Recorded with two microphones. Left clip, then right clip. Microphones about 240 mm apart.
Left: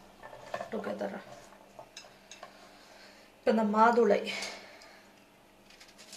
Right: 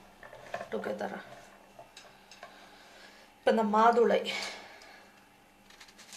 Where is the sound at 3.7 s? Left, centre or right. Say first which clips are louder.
Even; right.